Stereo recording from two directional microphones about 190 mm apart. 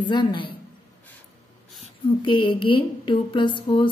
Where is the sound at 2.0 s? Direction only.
25° left (ahead or behind).